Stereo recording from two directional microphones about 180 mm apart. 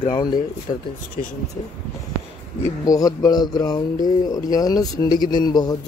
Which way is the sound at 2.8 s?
20° left (ahead or behind).